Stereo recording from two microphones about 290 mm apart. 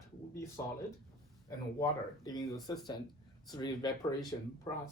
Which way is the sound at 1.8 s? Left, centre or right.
Centre.